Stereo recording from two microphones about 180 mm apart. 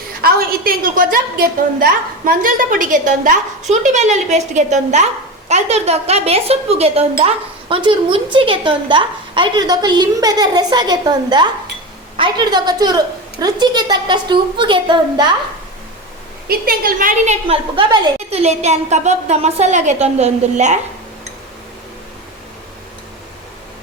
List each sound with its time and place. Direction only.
0.2 s a woman's voice: 55° right (ahead or behind); by 15.4 s 25° right (ahead or behind)
16.5 s a woman's voice: 55° right (ahead or behind)
17.5 s a woman's voice: 25° right (ahead or behind)